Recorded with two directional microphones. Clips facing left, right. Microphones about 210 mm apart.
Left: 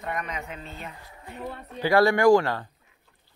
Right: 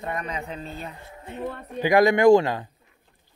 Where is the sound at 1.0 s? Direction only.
25° right (ahead or behind).